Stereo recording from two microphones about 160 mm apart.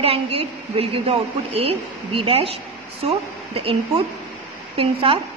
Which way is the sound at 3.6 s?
35° right (ahead or behind).